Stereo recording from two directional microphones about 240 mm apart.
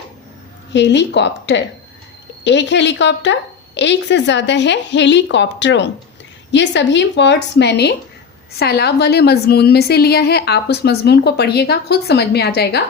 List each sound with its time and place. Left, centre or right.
0.7 s a woman's voice: left